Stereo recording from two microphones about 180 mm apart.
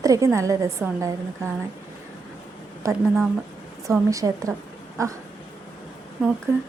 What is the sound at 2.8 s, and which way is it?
A woman's voice, 15° right (ahead or behind).